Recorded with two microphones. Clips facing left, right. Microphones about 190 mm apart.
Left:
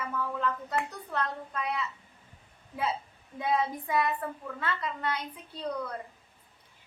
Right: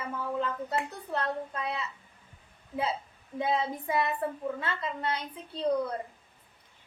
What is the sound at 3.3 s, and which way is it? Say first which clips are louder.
A woman's voice: even; 25° right (ahead or behind).